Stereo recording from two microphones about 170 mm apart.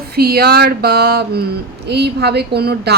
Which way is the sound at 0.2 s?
65° right (ahead or behind).